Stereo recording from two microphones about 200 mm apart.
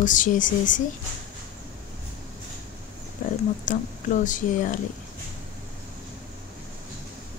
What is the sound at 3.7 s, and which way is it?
Speech, 40° left (ahead or behind).